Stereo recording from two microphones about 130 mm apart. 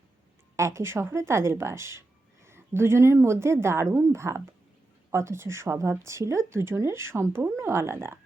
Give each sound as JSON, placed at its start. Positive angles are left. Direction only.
{"t": 0.5, "sound": "speech", "side_deg": -20}